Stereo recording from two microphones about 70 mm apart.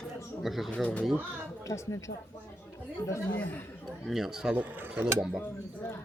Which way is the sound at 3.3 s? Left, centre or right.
Left.